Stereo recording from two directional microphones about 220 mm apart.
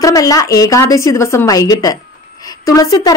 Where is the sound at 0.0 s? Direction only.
15° left (ahead or behind).